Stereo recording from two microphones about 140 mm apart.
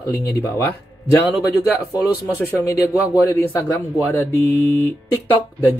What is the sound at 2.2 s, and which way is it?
A man's voice, 25° left (ahead or behind).